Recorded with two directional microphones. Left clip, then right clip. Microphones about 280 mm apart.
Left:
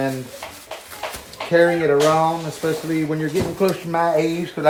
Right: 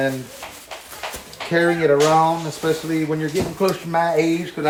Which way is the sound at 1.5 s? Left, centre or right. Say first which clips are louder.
Left 1 dB; centre.